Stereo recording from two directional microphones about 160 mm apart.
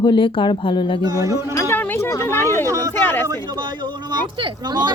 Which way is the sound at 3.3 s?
30° right (ahead or behind).